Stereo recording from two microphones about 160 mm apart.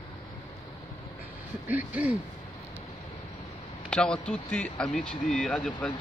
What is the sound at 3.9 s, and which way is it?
Speech, 5° left (ahead or behind).